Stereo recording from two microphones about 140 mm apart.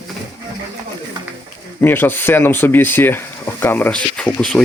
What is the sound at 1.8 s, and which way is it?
Speech, 15° left (ahead or behind).